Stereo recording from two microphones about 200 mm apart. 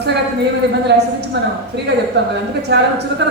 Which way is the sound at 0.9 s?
55° right (ahead or behind).